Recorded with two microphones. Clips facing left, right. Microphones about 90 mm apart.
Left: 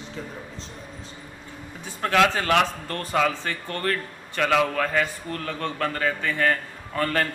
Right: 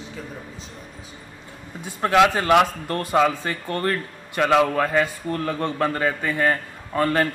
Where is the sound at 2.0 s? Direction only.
15° right (ahead or behind).